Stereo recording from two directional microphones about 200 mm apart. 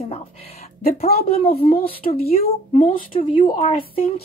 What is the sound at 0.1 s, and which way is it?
A woman's voice, 30° left (ahead or behind).